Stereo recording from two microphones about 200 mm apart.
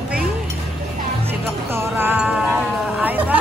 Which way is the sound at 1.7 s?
10° right (ahead or behind).